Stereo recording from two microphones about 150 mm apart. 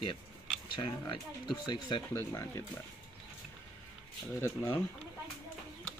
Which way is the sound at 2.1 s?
15° left (ahead or behind).